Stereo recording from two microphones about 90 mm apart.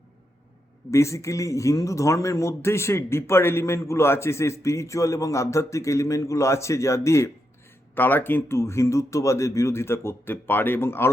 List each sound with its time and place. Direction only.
0.9 s a man's voice: 35° left (ahead or behind)
7.9 s speech: 20° left (ahead or behind)